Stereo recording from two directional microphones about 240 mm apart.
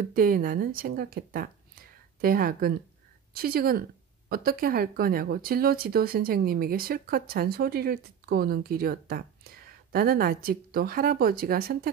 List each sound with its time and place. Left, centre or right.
0.0 s speech: right